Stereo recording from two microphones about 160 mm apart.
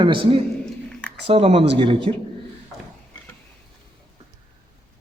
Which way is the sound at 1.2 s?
40° right (ahead or behind).